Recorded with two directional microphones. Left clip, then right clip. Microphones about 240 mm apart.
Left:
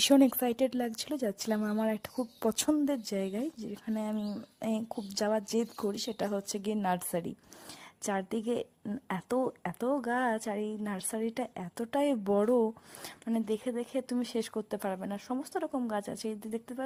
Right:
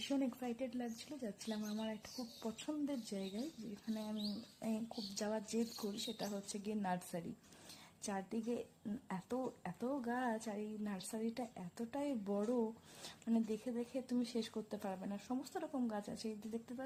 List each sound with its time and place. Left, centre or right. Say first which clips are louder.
0.1 s a woman's voice: left 16 dB; left